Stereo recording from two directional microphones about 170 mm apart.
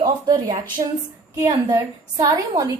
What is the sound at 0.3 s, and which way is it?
A woman's voice, 25° right (ahead or behind).